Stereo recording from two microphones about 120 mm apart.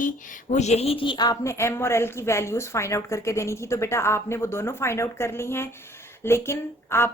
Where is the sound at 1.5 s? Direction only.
20° left (ahead or behind).